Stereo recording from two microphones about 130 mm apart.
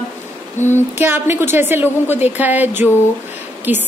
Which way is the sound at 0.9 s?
15° right (ahead or behind).